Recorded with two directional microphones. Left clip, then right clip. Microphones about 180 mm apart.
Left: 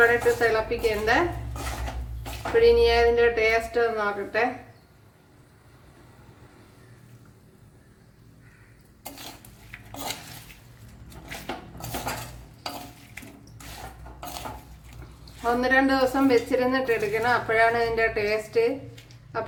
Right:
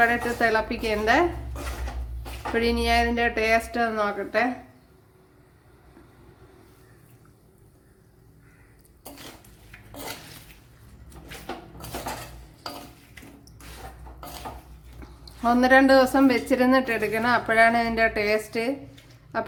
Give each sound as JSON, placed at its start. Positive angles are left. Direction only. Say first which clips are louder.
{"t": 0.0, "sound": "speech", "louder": "left 2 dB", "side_deg": -60}
{"t": 2.6, "sound": "speech", "louder": "left 5 dB", "side_deg": -55}
{"t": 15.2, "sound": "speech", "louder": "right 3 dB", "side_deg": -60}